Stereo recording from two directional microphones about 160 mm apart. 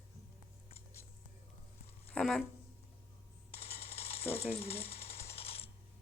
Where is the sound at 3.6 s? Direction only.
40° left (ahead or behind).